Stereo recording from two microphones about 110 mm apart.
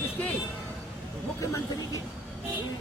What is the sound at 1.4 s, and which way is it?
Speech, 30° left (ahead or behind).